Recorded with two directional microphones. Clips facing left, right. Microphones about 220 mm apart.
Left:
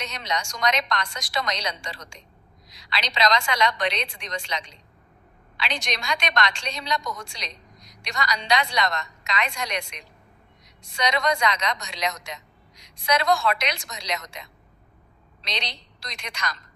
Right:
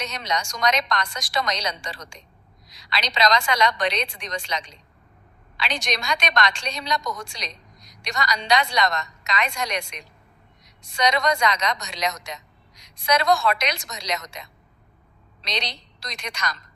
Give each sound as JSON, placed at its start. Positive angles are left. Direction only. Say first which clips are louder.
{"t": 0.0, "sound": "a woman's voice", "louder": "right 2 dB", "side_deg": -40}
{"t": 15.4, "sound": "a woman's voice", "louder": "right 3 dB", "side_deg": -45}